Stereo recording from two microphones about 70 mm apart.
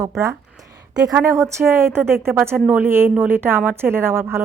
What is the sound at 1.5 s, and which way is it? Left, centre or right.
Speech, right.